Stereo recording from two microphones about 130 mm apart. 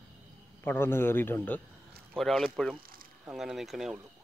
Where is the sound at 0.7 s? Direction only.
20° left (ahead or behind).